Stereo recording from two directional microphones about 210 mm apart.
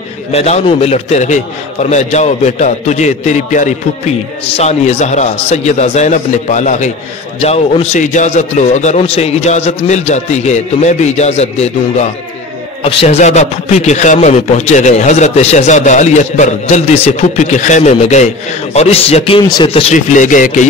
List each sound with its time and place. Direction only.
0.3 s a man's voice: 30° left (ahead or behind)